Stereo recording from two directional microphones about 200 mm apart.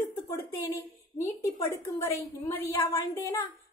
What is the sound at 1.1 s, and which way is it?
A woman's voice, 15° left (ahead or behind).